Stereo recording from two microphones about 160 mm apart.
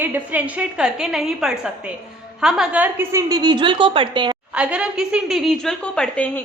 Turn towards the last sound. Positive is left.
turn(degrees=5)  # may be behind; listen again after turning